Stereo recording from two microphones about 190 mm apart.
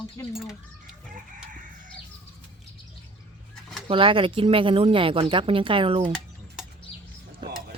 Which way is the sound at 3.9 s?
30° right (ahead or behind).